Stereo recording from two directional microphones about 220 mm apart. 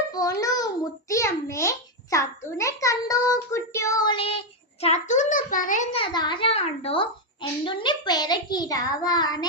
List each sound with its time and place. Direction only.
0.1 s a child's voice: 15° left (ahead or behind)